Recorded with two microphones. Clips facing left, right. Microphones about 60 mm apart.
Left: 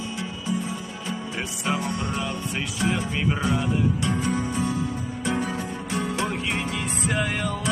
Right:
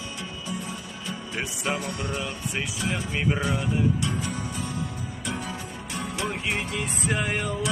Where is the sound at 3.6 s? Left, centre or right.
Left.